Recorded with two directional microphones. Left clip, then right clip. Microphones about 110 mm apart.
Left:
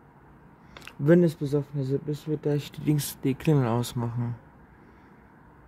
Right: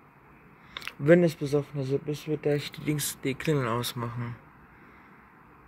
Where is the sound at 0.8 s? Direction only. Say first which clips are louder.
Right 1 dB; 50° left (ahead or behind); by 4.0 s 75° left (ahead or behind).